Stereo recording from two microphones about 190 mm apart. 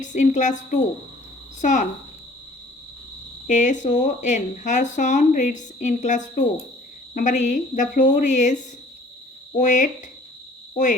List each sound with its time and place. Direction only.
0.0 s speech: 40° left (ahead or behind)
3.4 s speech: 40° left (ahead or behind)
9.6 s speech: 40° left (ahead or behind)